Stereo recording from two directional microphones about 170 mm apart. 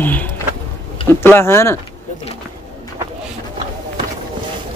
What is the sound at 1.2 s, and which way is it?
Speech, 15° left (ahead or behind).